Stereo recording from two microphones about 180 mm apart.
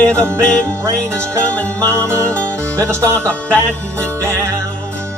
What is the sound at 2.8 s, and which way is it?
Speech, 15° right (ahead or behind).